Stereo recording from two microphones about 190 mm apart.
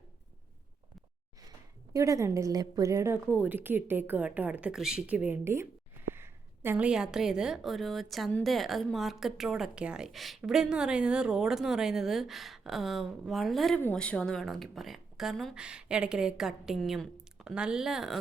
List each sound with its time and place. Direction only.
1.4 s a woman's voice: 15° right (ahead or behind); by 18.2 s centre (ahead or behind)